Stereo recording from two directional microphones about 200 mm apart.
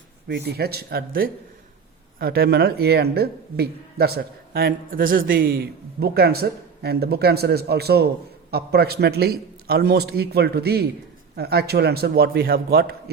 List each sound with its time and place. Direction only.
0.3 s speech: 55° right (ahead or behind)